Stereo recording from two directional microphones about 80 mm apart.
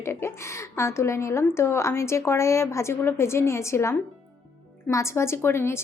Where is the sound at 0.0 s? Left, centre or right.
Left.